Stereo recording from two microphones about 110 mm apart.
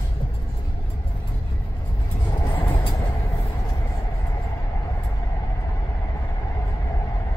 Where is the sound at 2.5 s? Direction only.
15° left (ahead or behind).